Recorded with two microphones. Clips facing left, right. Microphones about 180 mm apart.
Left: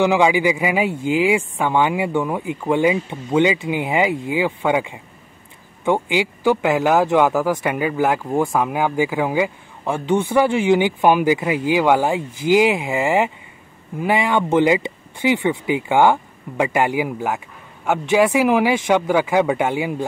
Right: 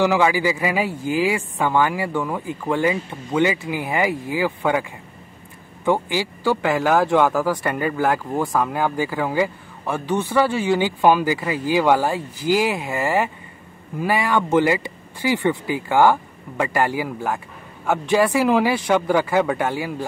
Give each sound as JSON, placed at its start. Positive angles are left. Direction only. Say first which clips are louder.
{"t": 0.0, "sound": "speech", "louder": "left 2 dB", "side_deg": 20}
{"t": 9.9, "sound": "speech", "louder": "left 2 dB", "side_deg": 25}